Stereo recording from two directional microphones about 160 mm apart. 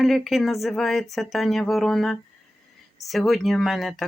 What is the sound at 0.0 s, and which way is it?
Speech, centre (ahead or behind).